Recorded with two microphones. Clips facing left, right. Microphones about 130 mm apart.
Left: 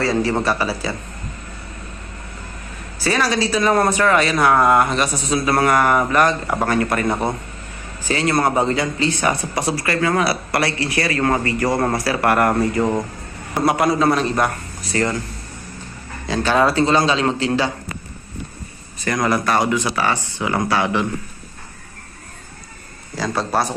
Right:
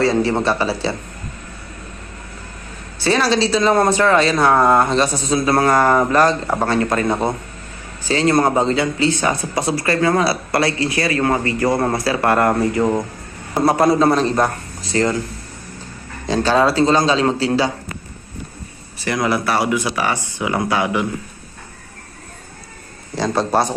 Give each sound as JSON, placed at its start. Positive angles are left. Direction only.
{"t": 0.0, "sound": "speech", "side_deg": -25}
{"t": 3.0, "sound": "speech", "side_deg": -25}
{"t": 7.1, "sound": "speech", "side_deg": -15}
{"t": 8.0, "sound": "speech", "side_deg": -30}
{"t": 12.8, "sound": "speech", "side_deg": -5}
{"t": 13.7, "sound": "a man's voice", "side_deg": -30}
{"t": 16.2, "sound": "a man's voice", "side_deg": -40}
{"t": 19.0, "sound": "speech", "side_deg": -10}
{"t": 23.1, "sound": "speech", "side_deg": -20}